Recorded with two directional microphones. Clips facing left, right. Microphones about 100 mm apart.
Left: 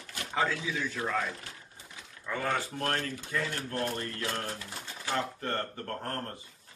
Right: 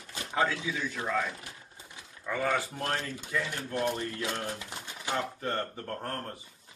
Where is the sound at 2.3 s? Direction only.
10° right (ahead or behind).